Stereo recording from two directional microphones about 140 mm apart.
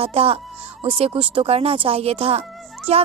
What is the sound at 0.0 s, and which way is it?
Speech, 45° right (ahead or behind).